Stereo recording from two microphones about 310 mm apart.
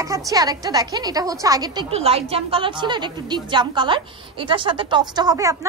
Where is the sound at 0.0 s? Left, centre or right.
Centre.